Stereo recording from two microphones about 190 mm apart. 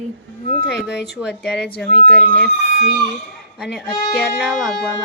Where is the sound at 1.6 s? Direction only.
55° left (ahead or behind).